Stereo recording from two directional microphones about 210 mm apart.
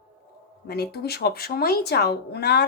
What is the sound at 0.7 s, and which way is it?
A woman's voice, 50° left (ahead or behind).